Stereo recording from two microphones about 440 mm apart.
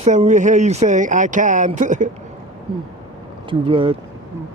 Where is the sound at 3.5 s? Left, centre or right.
Centre.